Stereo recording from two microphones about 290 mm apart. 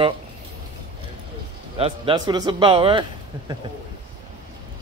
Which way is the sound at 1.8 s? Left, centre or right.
Centre.